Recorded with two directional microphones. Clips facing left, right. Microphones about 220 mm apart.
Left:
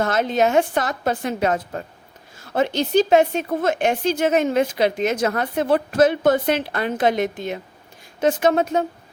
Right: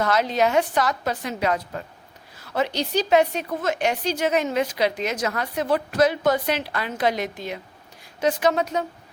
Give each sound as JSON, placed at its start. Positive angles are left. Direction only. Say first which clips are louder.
{"t": 0.0, "sound": "a woman's voice", "louder": "left 2 dB", "side_deg": 50}